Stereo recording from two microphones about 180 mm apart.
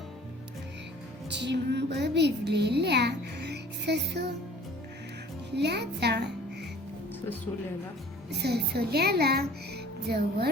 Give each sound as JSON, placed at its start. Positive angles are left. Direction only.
{"t": 1.3, "sound": "speech", "side_deg": -75}
{"t": 5.5, "sound": "a child's voice", "side_deg": -70}
{"t": 8.3, "sound": "speech", "side_deg": -65}